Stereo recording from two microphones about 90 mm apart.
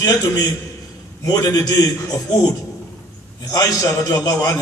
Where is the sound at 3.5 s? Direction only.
40° left (ahead or behind).